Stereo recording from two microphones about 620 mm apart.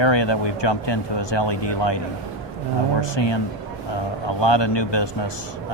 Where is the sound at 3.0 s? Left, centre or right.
Left.